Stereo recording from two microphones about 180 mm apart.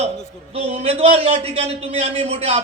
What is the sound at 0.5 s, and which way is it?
A man's voice, 35° right (ahead or behind).